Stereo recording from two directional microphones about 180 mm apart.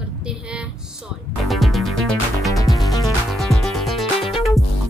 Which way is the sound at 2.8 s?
20° left (ahead or behind).